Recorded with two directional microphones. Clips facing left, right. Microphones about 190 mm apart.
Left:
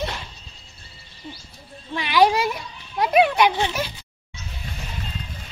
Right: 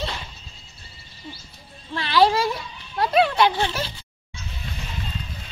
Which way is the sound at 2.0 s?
15° left (ahead or behind).